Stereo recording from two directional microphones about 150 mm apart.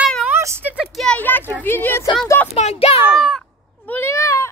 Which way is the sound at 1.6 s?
15° left (ahead or behind).